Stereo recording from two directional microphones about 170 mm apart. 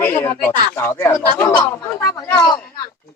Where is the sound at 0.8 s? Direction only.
15° left (ahead or behind).